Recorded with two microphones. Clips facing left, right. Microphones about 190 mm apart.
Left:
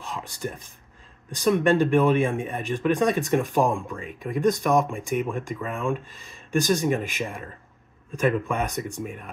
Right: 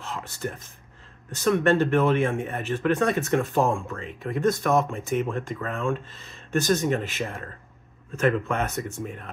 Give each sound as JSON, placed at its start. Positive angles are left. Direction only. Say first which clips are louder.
{"t": 0.0, "sound": "speech", "louder": "even", "side_deg": 15}